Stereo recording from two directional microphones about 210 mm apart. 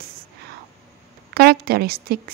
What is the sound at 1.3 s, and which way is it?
A woman's voice, 50° right (ahead or behind).